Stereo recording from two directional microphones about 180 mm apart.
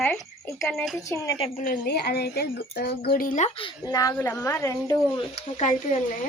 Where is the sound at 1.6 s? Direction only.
55° left (ahead or behind); by 5.2 s 20° left (ahead or behind).